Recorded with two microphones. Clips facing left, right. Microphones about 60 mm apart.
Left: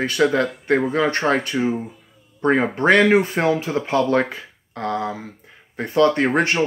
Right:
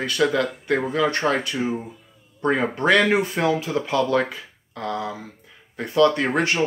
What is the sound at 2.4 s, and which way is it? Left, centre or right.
Speech, left.